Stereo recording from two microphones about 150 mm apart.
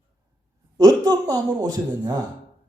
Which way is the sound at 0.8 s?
25° right (ahead or behind).